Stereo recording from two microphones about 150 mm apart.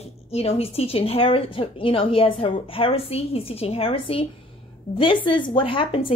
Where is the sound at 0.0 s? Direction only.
45° left (ahead or behind).